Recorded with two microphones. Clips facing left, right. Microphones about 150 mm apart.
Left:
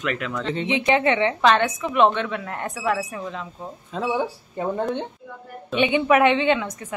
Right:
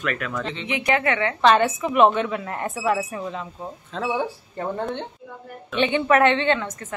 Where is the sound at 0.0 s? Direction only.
20° left (ahead or behind).